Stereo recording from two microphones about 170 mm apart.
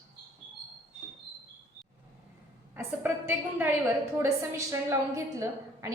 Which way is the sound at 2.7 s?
10° right (ahead or behind).